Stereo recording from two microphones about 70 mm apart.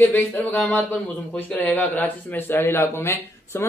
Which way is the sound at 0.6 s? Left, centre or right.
Left.